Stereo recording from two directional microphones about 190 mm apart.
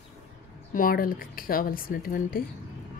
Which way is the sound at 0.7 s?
50° left (ahead or behind).